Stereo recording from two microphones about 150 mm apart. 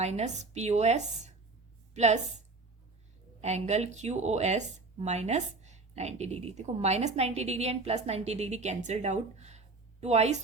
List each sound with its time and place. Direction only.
0.0 s a woman's voice: 45° right (ahead or behind)
3.4 s speech: 45° right (ahead or behind)